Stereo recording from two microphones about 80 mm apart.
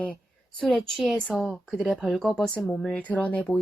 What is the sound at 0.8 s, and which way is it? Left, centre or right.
Speech, centre.